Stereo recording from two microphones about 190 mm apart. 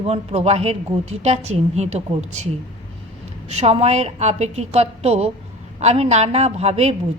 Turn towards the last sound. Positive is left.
turn(degrees=-35)  # may be behind; listen again after turning